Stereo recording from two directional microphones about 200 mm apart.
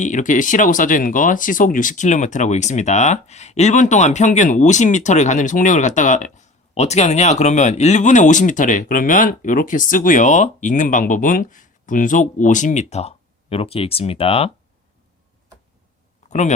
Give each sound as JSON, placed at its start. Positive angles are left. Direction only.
{"t": 0.0, "sound": "speech", "side_deg": 40}